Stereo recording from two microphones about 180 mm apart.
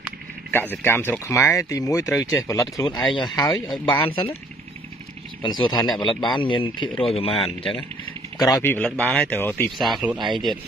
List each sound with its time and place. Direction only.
0.5 s a man's voice: 10° left (ahead or behind); by 4.4 s 30° left (ahead or behind)
5.4 s a man's voice: 25° left (ahead or behind)
8.5 s speech: 15° left (ahead or behind)
9.8 s speech: centre (ahead or behind)
10.1 s speech: 25° right (ahead or behind)